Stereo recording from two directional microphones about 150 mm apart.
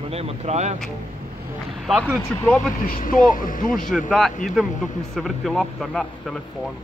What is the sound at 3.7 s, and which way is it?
A man's voice, centre (ahead or behind).